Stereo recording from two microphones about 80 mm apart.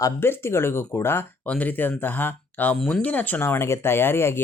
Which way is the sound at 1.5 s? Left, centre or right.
Centre.